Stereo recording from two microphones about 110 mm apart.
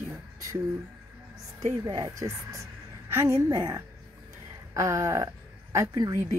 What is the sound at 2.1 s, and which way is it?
Speech, 30° right (ahead or behind).